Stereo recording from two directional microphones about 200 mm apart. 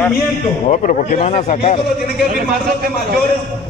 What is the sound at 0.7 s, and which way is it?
A man's voice, 40° left (ahead or behind).